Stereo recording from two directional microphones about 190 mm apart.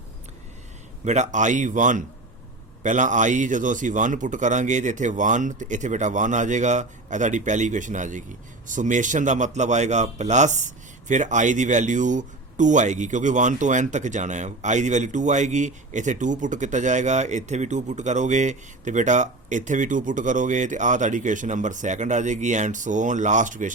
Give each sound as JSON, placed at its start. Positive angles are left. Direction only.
{"t": 1.0, "sound": "speech", "side_deg": -40}